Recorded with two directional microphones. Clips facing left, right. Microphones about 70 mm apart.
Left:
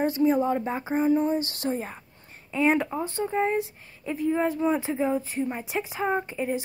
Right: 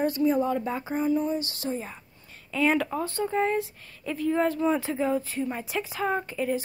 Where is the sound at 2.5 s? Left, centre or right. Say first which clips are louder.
Left 1 dB; left.